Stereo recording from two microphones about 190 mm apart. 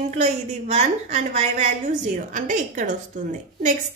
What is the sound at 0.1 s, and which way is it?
A woman's voice, 35° right (ahead or behind).